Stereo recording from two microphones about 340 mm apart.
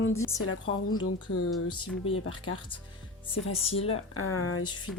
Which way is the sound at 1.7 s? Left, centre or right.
Centre.